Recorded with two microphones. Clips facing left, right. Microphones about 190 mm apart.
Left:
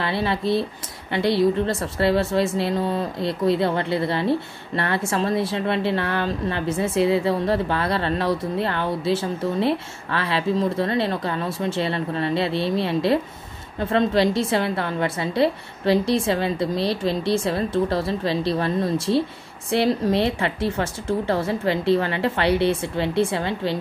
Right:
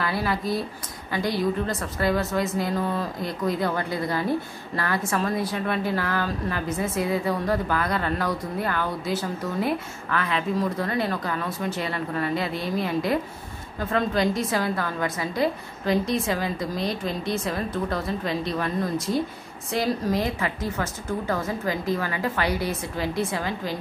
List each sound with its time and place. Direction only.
0.0 s a woman's voice: 25° left (ahead or behind)